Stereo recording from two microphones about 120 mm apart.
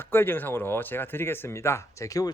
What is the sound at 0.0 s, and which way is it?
Speech, 15° left (ahead or behind).